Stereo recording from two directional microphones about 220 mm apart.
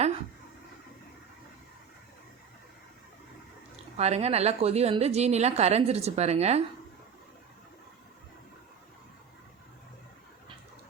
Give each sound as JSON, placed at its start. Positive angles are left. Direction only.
{"t": 3.9, "sound": "a woman's voice", "side_deg": -30}